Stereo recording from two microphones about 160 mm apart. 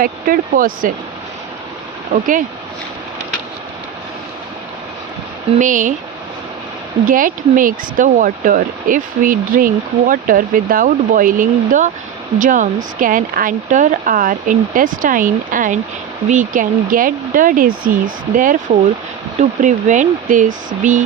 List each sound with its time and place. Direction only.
0.0 s speech: 60° right (ahead or behind)
5.5 s speech: 55° right (ahead or behind)
7.1 s speech: 55° right (ahead or behind)